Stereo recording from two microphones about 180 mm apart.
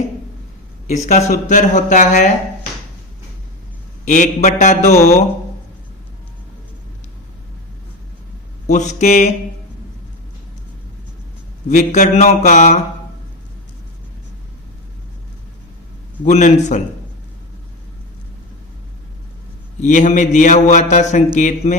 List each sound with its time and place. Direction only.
0.9 s speech: 40° left (ahead or behind)
4.0 s a man's voice: 45° left (ahead or behind)
8.7 s a man's voice: 40° left (ahead or behind)
11.7 s speech: 45° left (ahead or behind)
16.2 s a man's voice: 40° left (ahead or behind)
19.8 s speech: 45° left (ahead or behind)